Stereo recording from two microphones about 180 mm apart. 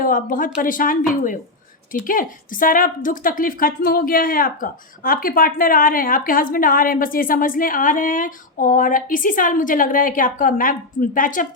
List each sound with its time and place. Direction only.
0.0 s a woman's voice: 50° left (ahead or behind)